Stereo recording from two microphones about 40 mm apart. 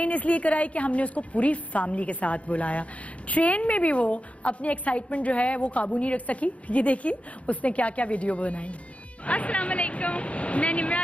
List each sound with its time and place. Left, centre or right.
0.0 s a woman's voice: left